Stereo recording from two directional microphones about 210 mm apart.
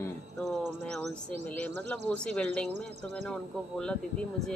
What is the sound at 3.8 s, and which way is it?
Speech, 5° left (ahead or behind).